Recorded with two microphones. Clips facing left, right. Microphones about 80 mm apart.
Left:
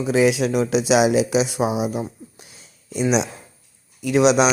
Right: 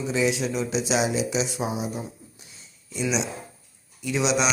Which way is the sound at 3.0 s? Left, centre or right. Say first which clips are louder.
Left 6 dB; left.